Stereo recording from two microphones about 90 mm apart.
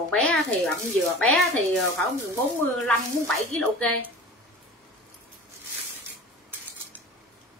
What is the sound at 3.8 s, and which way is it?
Speech, 15° left (ahead or behind).